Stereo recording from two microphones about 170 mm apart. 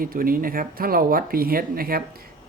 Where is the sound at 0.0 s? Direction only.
55° right (ahead or behind).